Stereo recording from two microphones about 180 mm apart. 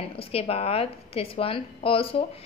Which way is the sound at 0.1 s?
30° left (ahead or behind).